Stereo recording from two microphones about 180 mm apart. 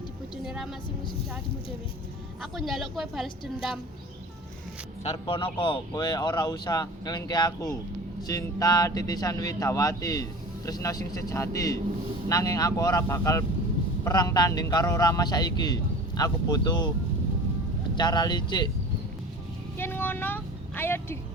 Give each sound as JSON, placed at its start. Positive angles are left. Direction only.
{"t": 0.4, "sound": "a woman's voice", "side_deg": -5}
{"t": 2.4, "sound": "a woman's voice", "side_deg": 0}
{"t": 5.0, "sound": "a man's voice", "side_deg": 30}
{"t": 17.9, "sound": "a man's voice", "side_deg": 25}
{"t": 19.7, "sound": "speech", "side_deg": 10}